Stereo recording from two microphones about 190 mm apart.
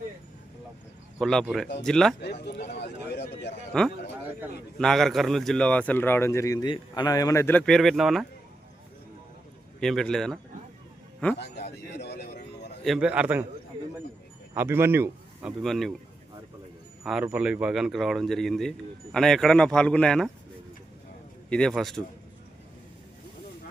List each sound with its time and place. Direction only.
1.2 s speech: centre (ahead or behind)
2.7 s a sound: 65° left (ahead or behind)
3.7 s a man's voice: 5° left (ahead or behind)
9.8 s speech: centre (ahead or behind)
11.3 s a man's voice: 60° left (ahead or behind)
12.8 s a man's voice: 5° right (ahead or behind)
14.5 s speech: 10° right (ahead or behind)
15.6 s speech: centre (ahead or behind)
17.0 s a man's voice: centre (ahead or behind)
21.5 s speech: 5° left (ahead or behind)